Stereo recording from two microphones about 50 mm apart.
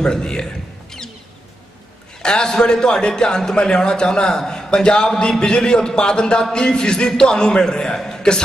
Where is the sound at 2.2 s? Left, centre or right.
Centre.